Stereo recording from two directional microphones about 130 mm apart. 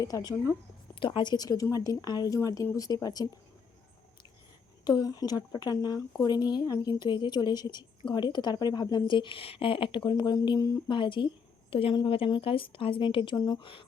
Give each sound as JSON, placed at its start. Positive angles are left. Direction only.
{"t": 0.0, "sound": "a woman's voice", "side_deg": 30}
{"t": 0.9, "sound": "a woman's voice", "side_deg": 40}
{"t": 4.9, "sound": "a woman's voice", "side_deg": 30}
{"t": 10.8, "sound": "a woman's voice", "side_deg": 40}
{"t": 13.3, "sound": "a woman's voice", "side_deg": 30}